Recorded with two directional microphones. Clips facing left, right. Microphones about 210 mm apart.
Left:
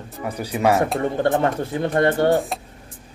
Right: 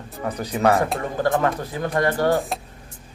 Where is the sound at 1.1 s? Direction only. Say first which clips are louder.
Even; 30° left (ahead or behind).